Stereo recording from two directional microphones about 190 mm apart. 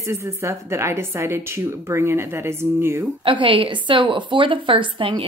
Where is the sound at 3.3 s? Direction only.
25° right (ahead or behind).